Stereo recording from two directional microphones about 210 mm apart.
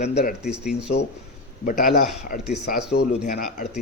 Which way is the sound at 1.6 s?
40° left (ahead or behind).